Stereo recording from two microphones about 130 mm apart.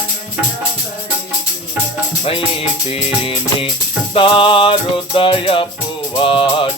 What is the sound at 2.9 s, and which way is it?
Music, 45° left (ahead or behind).